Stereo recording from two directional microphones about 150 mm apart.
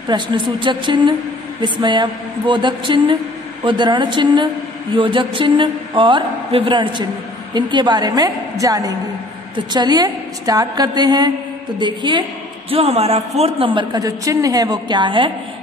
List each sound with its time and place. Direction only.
0.1 s a woman's voice: 30° right (ahead or behind)
13.9 s a woman's voice: 20° right (ahead or behind)